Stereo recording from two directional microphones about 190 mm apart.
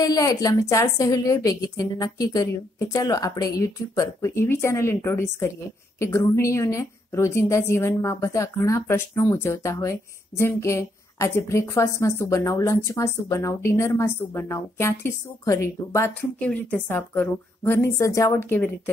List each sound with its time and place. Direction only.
0.0 s a woman's voice: 20° left (ahead or behind)